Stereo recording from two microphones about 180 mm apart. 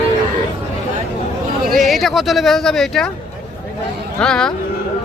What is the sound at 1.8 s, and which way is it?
Speech, centre (ahead or behind).